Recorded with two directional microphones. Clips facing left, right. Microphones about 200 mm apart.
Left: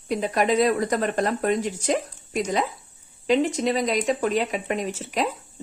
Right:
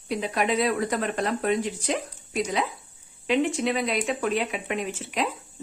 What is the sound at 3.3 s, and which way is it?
Speech, 35° left (ahead or behind).